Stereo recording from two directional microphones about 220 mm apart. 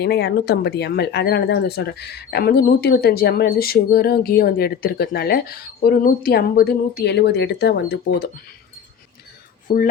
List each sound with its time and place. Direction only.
0.0 s speech: 50° left (ahead or behind)
9.6 s speech: 35° left (ahead or behind)